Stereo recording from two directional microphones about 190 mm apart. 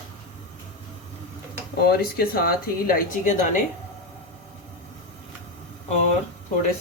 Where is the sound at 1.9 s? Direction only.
50° left (ahead or behind).